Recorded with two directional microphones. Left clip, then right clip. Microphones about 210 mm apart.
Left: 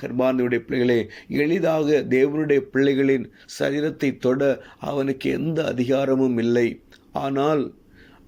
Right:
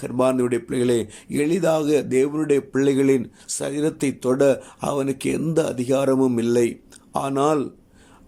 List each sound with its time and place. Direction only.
0.0 s speech: 15° right (ahead or behind)